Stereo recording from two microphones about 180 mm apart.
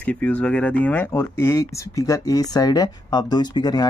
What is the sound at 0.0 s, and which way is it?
Speech, 10° left (ahead or behind).